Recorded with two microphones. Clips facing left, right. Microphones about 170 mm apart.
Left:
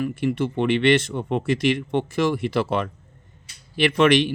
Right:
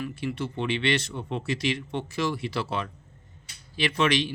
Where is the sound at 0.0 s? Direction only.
50° left (ahead or behind).